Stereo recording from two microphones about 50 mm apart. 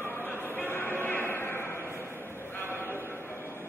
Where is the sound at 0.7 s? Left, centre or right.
Left.